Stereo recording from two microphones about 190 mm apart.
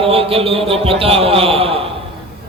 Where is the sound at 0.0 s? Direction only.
30° right (ahead or behind).